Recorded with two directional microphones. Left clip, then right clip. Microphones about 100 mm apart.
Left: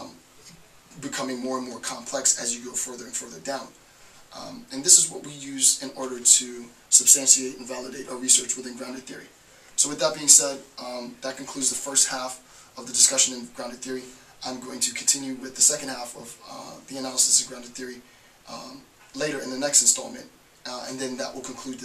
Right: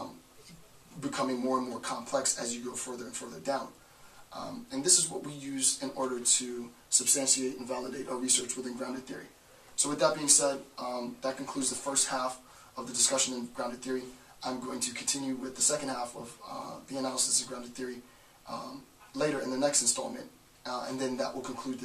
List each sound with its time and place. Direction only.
1.0 s speech: centre (ahead or behind)
7.0 s speech: centre (ahead or behind)